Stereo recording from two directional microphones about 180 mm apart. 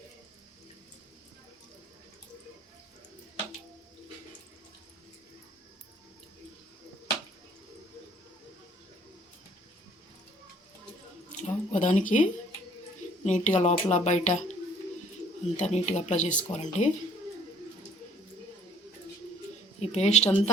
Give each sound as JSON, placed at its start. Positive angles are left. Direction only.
{"t": 11.3, "sound": "a sound", "side_deg": 45}
{"t": 13.2, "sound": "speech", "side_deg": 40}
{"t": 15.5, "sound": "speech", "side_deg": 40}
{"t": 19.8, "sound": "speech", "side_deg": 35}